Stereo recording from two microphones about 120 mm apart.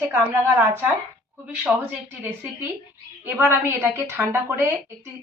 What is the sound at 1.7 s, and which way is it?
A man's voice, 10° right (ahead or behind).